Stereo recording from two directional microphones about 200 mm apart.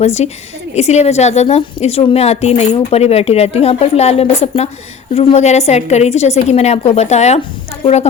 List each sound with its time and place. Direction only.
0.0 s a woman's voice: 30° left (ahead or behind)